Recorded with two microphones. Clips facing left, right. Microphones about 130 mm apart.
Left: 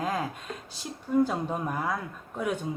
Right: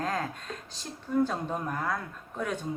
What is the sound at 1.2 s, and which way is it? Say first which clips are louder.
Speech: left 2 dB; 10° left (ahead or behind).